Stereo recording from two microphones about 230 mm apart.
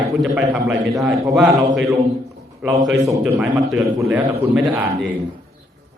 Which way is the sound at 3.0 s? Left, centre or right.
Centre.